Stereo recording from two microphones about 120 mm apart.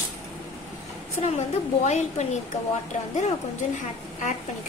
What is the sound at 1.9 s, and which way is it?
Speech, 70° left (ahead or behind).